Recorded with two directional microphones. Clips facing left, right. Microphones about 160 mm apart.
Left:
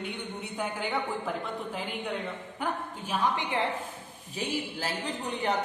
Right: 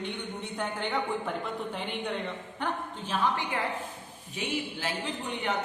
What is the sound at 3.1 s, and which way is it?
Speech, 20° left (ahead or behind).